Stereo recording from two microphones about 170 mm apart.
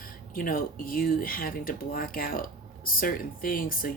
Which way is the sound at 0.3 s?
55° left (ahead or behind).